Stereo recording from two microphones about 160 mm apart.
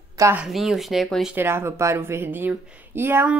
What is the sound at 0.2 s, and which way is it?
Speech, 15° right (ahead or behind).